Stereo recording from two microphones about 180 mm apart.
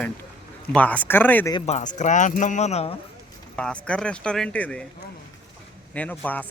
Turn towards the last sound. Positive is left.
turn(degrees=10)  # may be behind; listen again after turning